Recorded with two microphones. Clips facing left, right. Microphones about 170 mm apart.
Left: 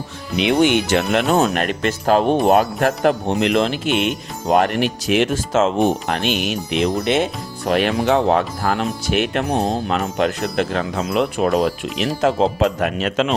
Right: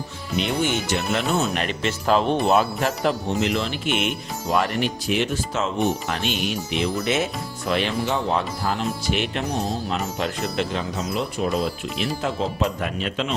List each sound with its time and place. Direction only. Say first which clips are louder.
0.3 s speech: left 8 dB; 75° left (ahead or behind); by 1.5 s 90° left
1.5 s speech: left 5 dB; 45° left (ahead or behind)
3.5 s speech: left 7 dB; 90° left
4.4 s speech: left 6 dB; 55° left (ahead or behind); by 5.7 s 90° left
6.2 s speech: left 4 dB; 75° left (ahead or behind)
7.1 s speech: left 5 dB; 30° left (ahead or behind)
7.7 s speech: left 6 dB; 55° left (ahead or behind)
7.9 s speech: left 7 dB; 75° left (ahead or behind)